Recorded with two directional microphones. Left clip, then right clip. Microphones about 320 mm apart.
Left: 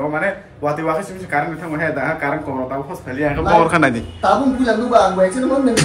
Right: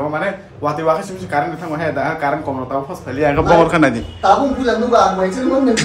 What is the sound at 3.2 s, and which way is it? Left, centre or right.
Speech, right.